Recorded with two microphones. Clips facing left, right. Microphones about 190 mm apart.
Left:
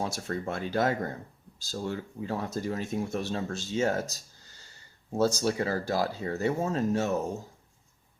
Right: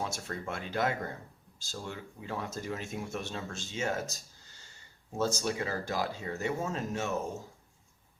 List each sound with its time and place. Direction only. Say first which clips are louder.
0.0 s speech: left 5 dB; 35° left (ahead or behind)